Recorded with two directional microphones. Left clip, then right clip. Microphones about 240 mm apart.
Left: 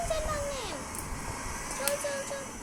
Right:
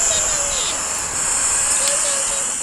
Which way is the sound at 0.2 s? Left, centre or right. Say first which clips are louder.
Right 11 dB; right.